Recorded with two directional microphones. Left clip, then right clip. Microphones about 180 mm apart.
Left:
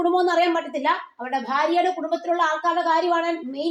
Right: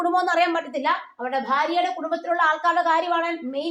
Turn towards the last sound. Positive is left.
turn(degrees=-25)  # may be behind; listen again after turning